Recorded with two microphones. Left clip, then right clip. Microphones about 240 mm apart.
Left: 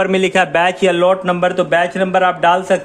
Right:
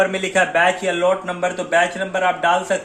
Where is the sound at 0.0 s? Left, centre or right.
Left.